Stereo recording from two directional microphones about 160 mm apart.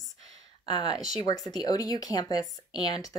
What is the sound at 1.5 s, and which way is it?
Speech, 25° left (ahead or behind).